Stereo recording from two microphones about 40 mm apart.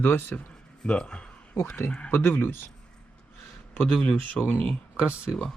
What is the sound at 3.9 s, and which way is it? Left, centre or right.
Speech, left.